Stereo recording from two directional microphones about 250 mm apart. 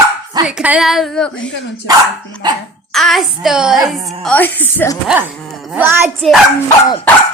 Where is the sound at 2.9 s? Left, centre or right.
Centre.